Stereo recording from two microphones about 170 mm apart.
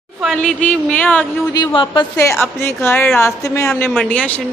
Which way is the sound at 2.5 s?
15° left (ahead or behind).